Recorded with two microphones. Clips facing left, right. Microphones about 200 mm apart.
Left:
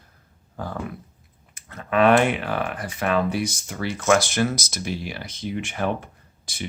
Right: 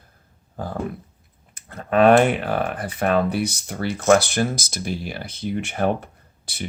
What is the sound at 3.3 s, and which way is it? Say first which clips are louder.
Speech: right 2 dB; 60° right (ahead or behind).